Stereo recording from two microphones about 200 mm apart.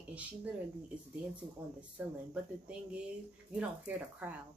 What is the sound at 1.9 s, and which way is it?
Speech, 5° right (ahead or behind).